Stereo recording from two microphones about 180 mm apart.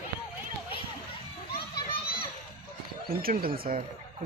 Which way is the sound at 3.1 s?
55° right (ahead or behind).